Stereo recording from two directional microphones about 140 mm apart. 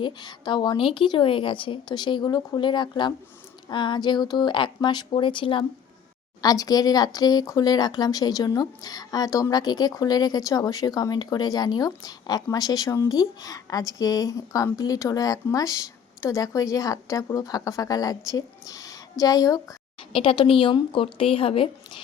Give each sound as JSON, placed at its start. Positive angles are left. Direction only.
{"t": 0.0, "sound": "a woman's voice", "side_deg": 30}
{"t": 6.4, "sound": "speech", "side_deg": 25}
{"t": 20.1, "sound": "a woman's voice", "side_deg": 40}